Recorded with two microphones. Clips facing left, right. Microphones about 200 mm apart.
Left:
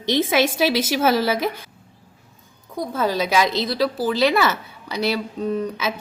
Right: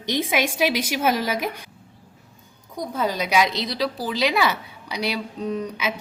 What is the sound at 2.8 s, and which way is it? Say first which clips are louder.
A woman's voice: left 3 dB; 15° right (ahead or behind).